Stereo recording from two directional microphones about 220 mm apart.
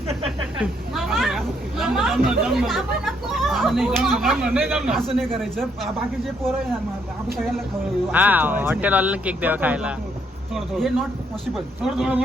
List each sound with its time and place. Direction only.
0.1 s speech: 25° right (ahead or behind)
0.6 s speech: centre (ahead or behind)
8.1 s speech: 10° right (ahead or behind)